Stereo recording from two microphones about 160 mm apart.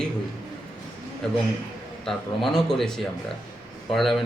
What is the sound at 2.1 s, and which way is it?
Speech, centre (ahead or behind).